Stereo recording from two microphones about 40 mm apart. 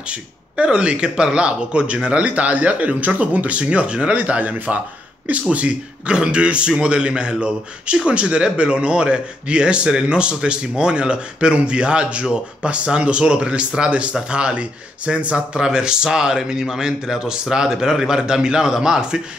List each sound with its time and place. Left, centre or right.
0.1 s speech: right
15.3 s speech: centre